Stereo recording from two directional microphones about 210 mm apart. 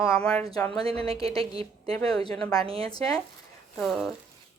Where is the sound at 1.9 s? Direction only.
20° left (ahead or behind).